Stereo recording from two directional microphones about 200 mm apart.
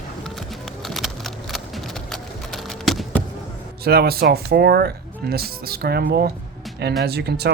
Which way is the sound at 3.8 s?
50° right (ahead or behind).